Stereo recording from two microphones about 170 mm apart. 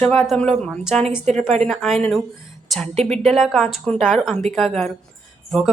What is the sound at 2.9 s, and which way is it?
Speech, 40° right (ahead or behind).